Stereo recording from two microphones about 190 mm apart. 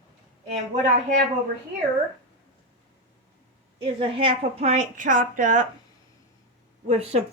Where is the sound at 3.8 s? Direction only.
30° right (ahead or behind).